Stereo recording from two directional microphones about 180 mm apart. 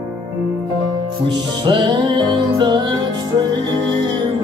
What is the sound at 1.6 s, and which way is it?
Music, 25° right (ahead or behind).